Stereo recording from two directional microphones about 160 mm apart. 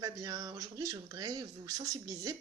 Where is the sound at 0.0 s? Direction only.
20° right (ahead or behind).